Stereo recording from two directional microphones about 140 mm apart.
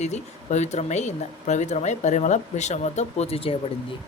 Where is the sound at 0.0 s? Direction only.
55° left (ahead or behind).